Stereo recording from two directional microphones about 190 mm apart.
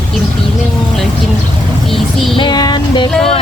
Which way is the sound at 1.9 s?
Centre (ahead or behind).